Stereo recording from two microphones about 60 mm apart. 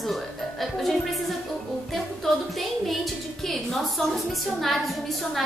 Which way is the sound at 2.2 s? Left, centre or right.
Centre.